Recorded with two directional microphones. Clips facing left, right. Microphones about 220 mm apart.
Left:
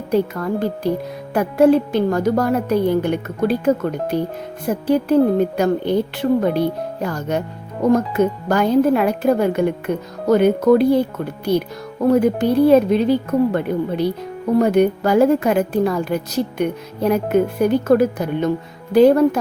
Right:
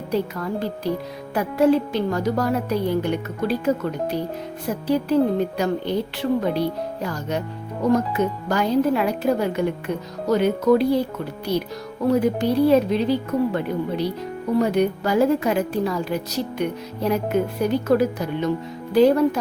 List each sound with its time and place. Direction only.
0.1 s speech: 50° left (ahead or behind)